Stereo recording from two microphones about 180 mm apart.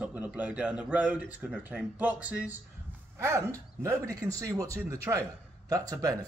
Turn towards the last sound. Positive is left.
turn(degrees=-20)  # may be behind; listen again after turning